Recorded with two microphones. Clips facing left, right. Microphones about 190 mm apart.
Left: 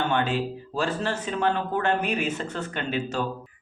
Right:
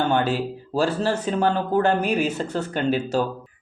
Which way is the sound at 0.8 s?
35° right (ahead or behind).